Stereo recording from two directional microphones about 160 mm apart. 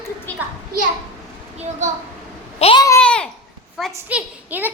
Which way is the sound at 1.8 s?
50° right (ahead or behind).